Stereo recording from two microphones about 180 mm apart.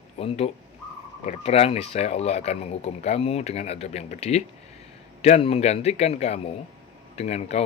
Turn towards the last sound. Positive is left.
turn(degrees=35)  # may be behind; listen again after turning